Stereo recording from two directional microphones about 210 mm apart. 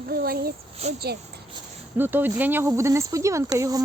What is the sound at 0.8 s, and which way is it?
Speech, 30° right (ahead or behind).